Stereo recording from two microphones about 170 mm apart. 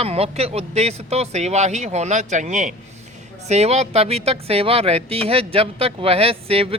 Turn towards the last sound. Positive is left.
turn(degrees=-35)  # may be behind; listen again after turning